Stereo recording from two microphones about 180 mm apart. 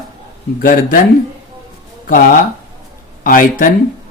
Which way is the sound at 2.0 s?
50° left (ahead or behind).